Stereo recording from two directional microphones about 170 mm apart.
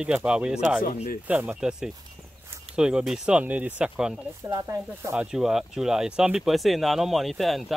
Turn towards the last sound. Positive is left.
turn(degrees=0)  # may be behind; listen again after turning